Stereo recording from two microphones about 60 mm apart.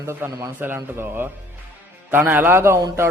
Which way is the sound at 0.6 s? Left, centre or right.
Right.